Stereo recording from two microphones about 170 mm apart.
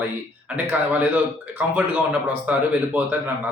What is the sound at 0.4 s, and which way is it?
A man's voice, 10° right (ahead or behind).